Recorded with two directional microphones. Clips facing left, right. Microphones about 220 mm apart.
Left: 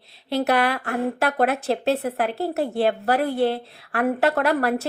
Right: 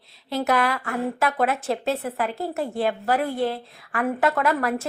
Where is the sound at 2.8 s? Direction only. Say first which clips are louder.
Left 2 dB; 60° left (ahead or behind).